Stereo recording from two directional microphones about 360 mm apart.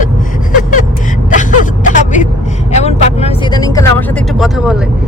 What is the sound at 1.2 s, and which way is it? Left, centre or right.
Vehicle, left.